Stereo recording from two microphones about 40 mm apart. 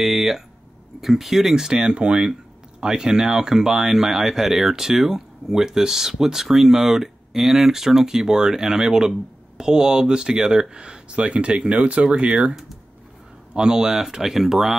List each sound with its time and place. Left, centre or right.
0.0 s speech: centre; by 12.4 s right
13.5 s speech: centre